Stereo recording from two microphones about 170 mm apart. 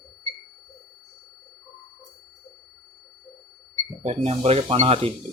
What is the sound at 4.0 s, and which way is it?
Speech, 40° right (ahead or behind).